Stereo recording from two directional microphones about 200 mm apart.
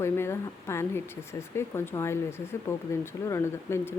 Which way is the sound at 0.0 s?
10° left (ahead or behind).